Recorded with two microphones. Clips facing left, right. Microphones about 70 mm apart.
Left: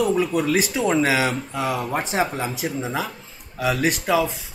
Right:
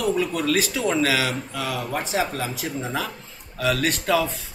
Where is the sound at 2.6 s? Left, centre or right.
Centre.